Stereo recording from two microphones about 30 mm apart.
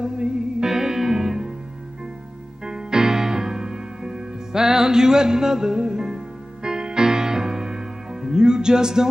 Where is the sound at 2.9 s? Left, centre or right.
Centre.